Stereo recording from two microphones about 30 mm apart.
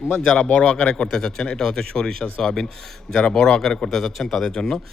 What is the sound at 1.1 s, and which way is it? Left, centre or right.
Speech, centre.